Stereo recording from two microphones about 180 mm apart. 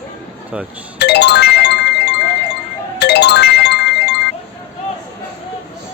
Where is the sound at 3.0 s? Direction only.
70° left (ahead or behind).